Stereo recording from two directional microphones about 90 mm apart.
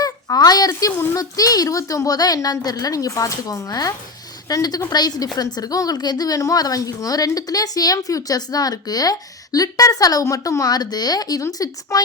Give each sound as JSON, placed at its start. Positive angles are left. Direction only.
{"t": 0.0, "sound": "a child's voice", "side_deg": 45}